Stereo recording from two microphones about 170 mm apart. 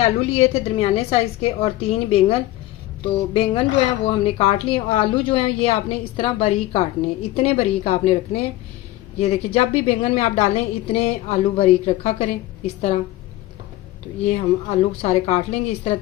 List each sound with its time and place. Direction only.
0.0 s speech: 35° left (ahead or behind)
14.3 s speech: 40° left (ahead or behind)